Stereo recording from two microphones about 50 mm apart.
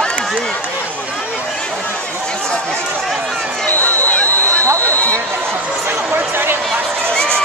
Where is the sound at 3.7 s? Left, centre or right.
Left.